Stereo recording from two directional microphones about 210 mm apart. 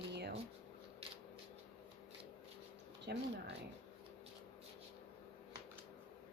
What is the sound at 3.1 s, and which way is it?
Speech, 50° right (ahead or behind).